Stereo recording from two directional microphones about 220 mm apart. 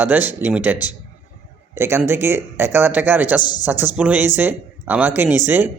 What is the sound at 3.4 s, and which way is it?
Speech, 20° left (ahead or behind).